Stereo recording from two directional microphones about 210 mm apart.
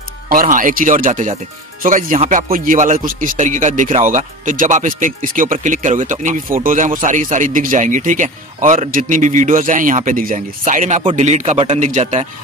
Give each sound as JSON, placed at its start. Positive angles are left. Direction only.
{"t": 0.3, "sound": "a man's voice", "side_deg": -40}